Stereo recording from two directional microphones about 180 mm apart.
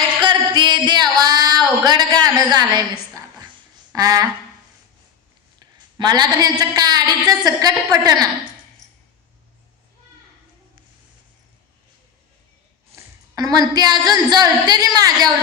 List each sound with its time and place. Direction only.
0.2 s a sound: 25° right (ahead or behind)
2.5 s a woman's voice: 20° right (ahead or behind)
6.0 s a woman's voice: 25° right (ahead or behind)
13.3 s a woman's voice: 20° right (ahead or behind)